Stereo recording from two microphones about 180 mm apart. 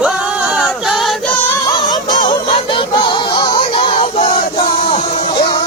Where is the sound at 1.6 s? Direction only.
20° left (ahead or behind).